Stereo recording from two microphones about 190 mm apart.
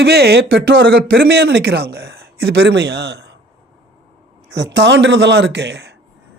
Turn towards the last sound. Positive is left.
turn(degrees=-60)  # may be behind; listen again after turning